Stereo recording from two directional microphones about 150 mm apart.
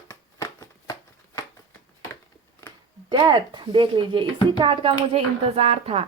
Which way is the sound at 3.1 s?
30° right (ahead or behind).